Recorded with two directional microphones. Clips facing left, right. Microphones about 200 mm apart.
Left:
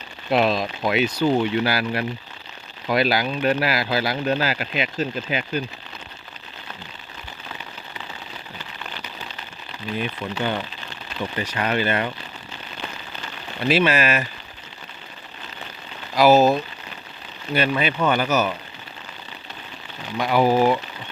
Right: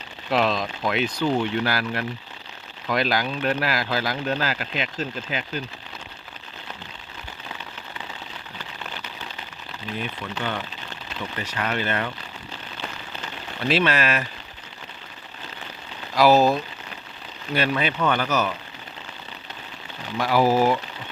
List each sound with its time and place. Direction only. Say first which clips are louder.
0.3 s speech: left 3 dB; 10° left (ahead or behind)
10.0 s speech: left 4 dB; 15° left (ahead or behind)
13.7 s speech: left 3 dB; 5° left (ahead or behind)
16.1 s speech: left 2 dB; centre (ahead or behind)
17.5 s speech: left 2 dB; centre (ahead or behind)
20.1 s speech: left 1 dB; centre (ahead or behind)